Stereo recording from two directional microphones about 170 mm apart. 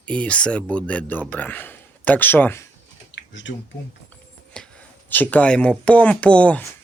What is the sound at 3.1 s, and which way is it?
Typing, 90° left.